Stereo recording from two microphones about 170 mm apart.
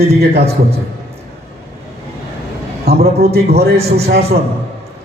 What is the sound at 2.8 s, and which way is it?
A man's voice, 65° right (ahead or behind).